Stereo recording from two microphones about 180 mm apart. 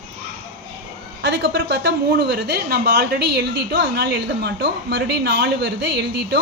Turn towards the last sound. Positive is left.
turn(degrees=-70)  # may be behind; listen again after turning